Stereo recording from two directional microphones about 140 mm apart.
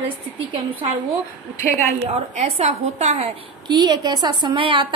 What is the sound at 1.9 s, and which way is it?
A woman's voice, 50° right (ahead or behind).